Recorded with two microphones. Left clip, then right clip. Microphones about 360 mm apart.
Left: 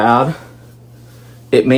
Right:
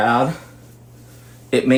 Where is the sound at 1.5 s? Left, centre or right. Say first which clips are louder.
Left 7 dB; left.